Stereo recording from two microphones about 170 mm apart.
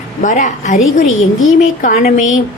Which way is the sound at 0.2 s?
50° left (ahead or behind).